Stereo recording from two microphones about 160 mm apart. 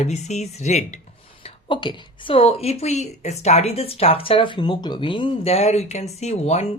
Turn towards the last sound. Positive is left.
turn(degrees=45)  # may be behind; listen again after turning